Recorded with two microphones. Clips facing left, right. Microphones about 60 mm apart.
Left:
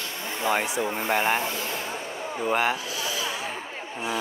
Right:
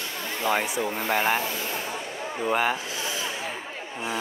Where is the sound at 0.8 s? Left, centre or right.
Left.